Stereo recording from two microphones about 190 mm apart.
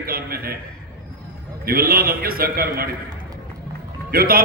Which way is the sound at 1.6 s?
50° right (ahead or behind).